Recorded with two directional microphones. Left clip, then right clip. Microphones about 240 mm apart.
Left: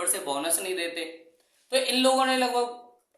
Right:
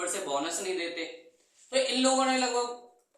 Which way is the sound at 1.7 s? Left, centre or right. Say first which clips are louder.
Left 3 dB; left.